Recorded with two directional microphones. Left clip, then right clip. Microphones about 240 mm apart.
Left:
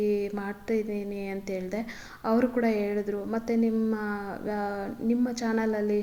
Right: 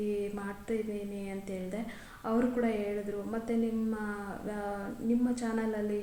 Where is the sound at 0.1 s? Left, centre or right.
Left.